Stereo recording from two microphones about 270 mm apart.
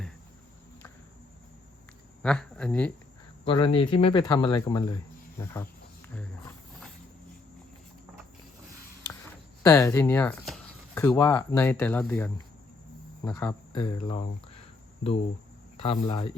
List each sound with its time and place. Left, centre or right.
2.2 s speech: centre
3.4 s speech: centre
9.6 s speech: centre
15.8 s speech: centre